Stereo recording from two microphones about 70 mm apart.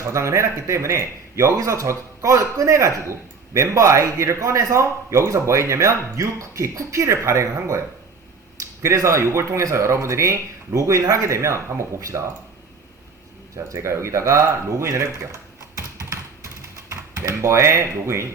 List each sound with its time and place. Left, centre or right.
0.0 s a man's voice: right
8.8 s a man's voice: right
13.7 s speech: right